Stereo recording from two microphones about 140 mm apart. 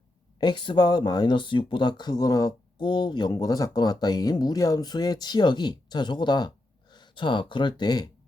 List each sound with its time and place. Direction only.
0.3 s speech: 35° left (ahead or behind)